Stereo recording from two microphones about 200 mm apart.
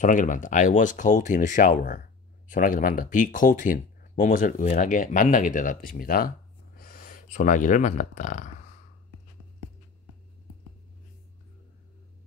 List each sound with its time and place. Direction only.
0.0 s speech: 40° left (ahead or behind)